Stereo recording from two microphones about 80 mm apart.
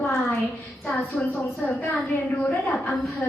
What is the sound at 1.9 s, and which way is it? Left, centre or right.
Speech, centre.